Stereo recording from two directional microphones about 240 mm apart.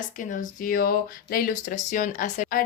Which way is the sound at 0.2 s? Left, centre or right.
Left.